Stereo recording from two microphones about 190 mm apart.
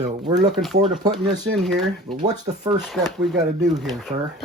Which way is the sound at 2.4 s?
35° right (ahead or behind).